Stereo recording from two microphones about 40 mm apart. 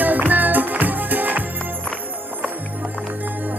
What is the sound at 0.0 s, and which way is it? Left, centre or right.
Music, right.